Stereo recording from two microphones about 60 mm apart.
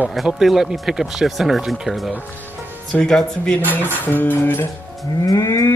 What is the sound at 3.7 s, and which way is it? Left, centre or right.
Music, left.